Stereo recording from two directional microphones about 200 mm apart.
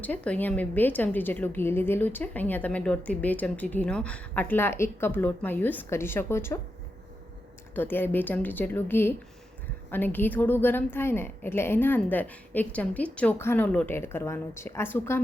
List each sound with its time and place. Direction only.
0.0 s a woman's voice: 5° left (ahead or behind)
7.8 s a woman's voice: 10° left (ahead or behind)